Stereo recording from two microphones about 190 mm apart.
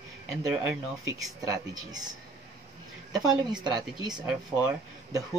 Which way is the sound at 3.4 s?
20° right (ahead or behind).